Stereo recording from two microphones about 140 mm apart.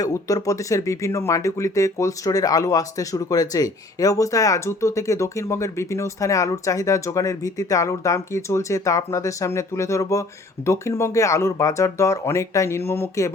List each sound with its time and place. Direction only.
0.0 s speech: 25° left (ahead or behind)